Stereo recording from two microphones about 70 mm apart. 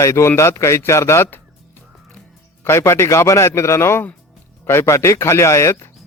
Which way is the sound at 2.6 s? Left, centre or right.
Left.